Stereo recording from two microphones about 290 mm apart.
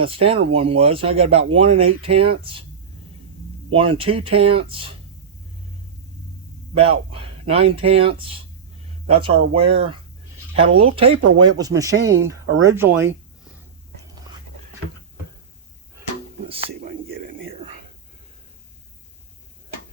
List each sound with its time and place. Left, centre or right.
0.0 s speech: centre
3.7 s speech: centre
6.7 s speech: centre
16.5 s a sound: centre